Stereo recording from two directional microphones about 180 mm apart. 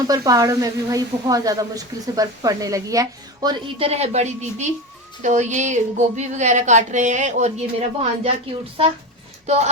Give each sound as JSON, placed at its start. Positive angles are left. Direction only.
{"t": 0.1, "sound": "speech", "side_deg": -20}